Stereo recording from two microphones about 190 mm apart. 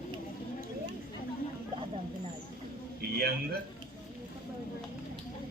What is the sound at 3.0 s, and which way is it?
Speech, 55° right (ahead or behind).